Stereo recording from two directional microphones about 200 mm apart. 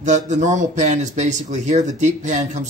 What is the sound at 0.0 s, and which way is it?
Speech, 35° right (ahead or behind).